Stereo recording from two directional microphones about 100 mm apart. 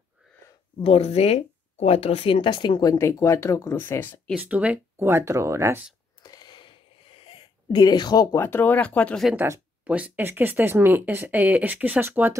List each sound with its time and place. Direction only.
0.8 s speech: 85° left; by 4.2 s 25° left (ahead or behind)
4.4 s speech: 15° right (ahead or behind)
4.9 s speech: 25° right (ahead or behind)
6.2 s a sound: 45° left (ahead or behind)
7.2 s a sound: 60° left (ahead or behind); by 8.4 s 40° left (ahead or behind)
8.4 s speech: 20° left (ahead or behind)
9.8 s speech: 15° right (ahead or behind)